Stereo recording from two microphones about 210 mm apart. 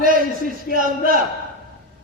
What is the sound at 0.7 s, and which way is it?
Speech, 50° left (ahead or behind).